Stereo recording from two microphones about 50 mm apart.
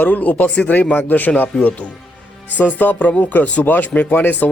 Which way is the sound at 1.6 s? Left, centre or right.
Left.